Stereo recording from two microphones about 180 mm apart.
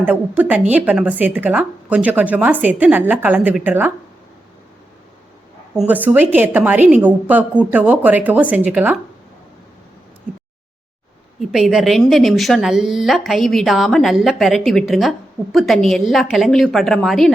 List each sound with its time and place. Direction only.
0.0 s speech: 10° right (ahead or behind)
5.9 s speech: 10° right (ahead or behind)
11.3 s a woman's voice: centre (ahead or behind)